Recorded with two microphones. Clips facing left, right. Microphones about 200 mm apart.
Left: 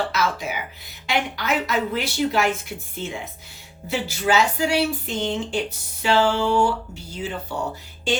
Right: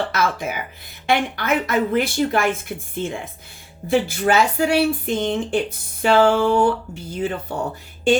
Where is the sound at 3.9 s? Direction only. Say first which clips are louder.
Right 4 dB; 55° right (ahead or behind).